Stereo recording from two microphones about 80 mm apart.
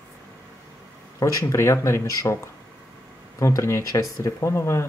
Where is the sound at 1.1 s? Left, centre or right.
Left.